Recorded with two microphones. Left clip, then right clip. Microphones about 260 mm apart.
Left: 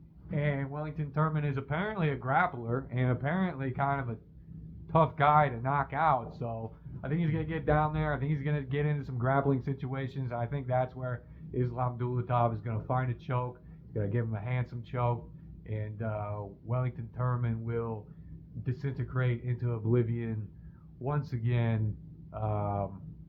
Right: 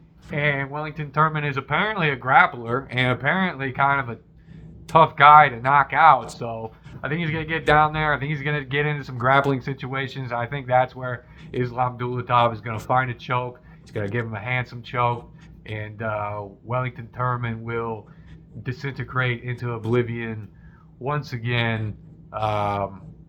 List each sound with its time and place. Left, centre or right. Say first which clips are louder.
0.3 s speech: right 11 dB; centre